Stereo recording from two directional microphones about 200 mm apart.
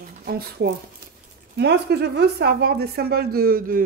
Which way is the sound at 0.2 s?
50° right (ahead or behind).